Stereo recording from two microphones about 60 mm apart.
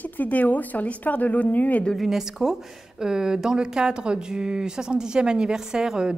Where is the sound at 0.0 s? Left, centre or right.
Left.